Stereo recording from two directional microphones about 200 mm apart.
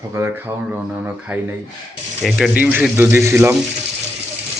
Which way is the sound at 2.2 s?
Centre (ahead or behind).